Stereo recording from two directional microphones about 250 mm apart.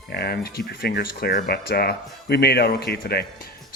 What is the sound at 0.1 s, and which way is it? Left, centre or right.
Speech, left.